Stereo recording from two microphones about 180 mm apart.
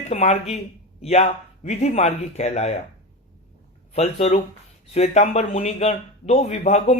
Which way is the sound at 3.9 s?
35° left (ahead or behind).